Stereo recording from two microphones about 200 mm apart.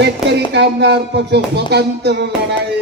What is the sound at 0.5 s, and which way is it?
Speech, 55° right (ahead or behind).